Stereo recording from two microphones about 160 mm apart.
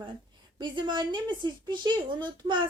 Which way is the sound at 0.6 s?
30° right (ahead or behind).